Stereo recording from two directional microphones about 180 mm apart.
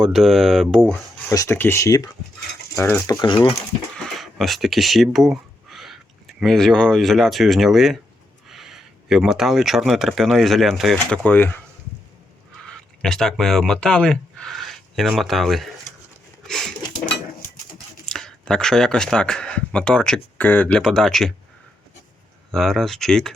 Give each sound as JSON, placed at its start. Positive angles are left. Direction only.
{"t": 0.0, "sound": "speech", "side_deg": 0}
{"t": 1.3, "sound": "speech", "side_deg": 15}
{"t": 3.9, "sound": "speech", "side_deg": 0}
{"t": 12.6, "sound": "speech", "side_deg": 5}
{"t": 16.4, "sound": "a sound", "side_deg": 0}
{"t": 18.0, "sound": "speech", "side_deg": 5}
{"t": 22.5, "sound": "speech", "side_deg": 0}